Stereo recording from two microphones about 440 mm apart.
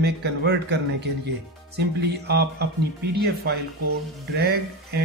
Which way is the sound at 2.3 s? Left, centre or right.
Right.